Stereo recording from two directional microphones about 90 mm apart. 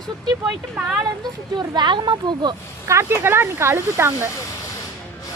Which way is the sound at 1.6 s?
55° right (ahead or behind).